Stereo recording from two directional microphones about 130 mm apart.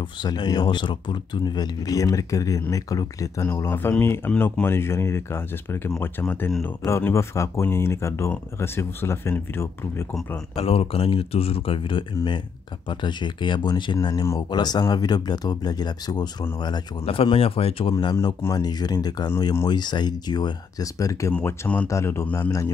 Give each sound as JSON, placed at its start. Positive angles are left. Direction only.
{"t": 0.0, "sound": "speech", "side_deg": 35}
{"t": 10.5, "sound": "speech", "side_deg": 45}
{"t": 17.0, "sound": "speech", "side_deg": 45}
{"t": 18.1, "sound": "speech", "side_deg": 25}
{"t": 21.3, "sound": "speech", "side_deg": 15}